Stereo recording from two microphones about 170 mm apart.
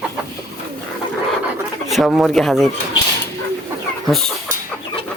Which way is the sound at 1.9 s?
Centre (ahead or behind).